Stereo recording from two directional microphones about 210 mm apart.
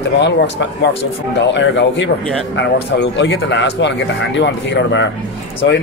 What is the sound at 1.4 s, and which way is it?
Speech, 60° left (ahead or behind).